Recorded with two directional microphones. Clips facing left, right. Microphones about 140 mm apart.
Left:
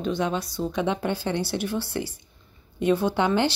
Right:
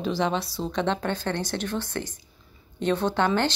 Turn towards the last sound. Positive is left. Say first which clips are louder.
# left 1 dB
turn(degrees=15)  # may be behind; listen again after turning